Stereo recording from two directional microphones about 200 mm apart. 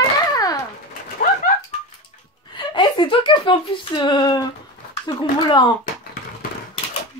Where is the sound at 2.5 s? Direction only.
25° left (ahead or behind).